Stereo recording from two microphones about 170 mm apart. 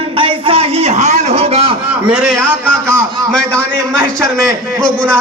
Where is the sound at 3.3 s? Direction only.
10° left (ahead or behind).